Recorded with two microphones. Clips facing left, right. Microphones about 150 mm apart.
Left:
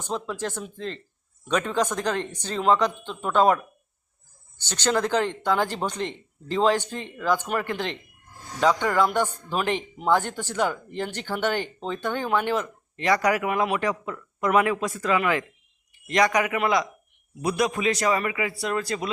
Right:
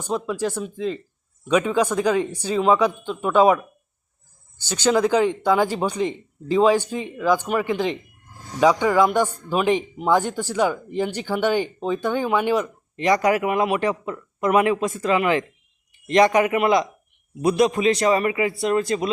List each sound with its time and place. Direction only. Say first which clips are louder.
0.0 s a man's voice: right 5 dB; 10° right (ahead or behind)